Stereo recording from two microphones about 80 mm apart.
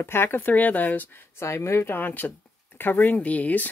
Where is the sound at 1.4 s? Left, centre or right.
Left.